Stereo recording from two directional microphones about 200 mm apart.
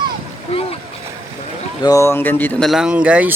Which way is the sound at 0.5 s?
30° left (ahead or behind).